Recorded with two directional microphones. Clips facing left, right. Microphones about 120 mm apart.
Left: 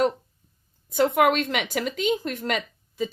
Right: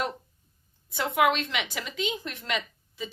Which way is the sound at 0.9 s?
45° left (ahead or behind).